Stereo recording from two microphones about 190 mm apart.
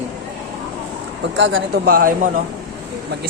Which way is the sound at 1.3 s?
75° right (ahead or behind).